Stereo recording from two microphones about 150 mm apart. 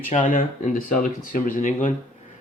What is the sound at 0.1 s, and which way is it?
A man's voice, 60° left (ahead or behind).